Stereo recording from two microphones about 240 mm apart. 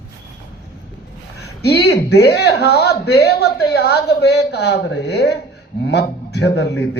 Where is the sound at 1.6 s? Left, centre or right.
Left.